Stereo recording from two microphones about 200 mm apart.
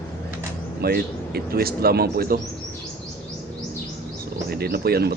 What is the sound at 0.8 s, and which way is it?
Speech, 50° right (ahead or behind).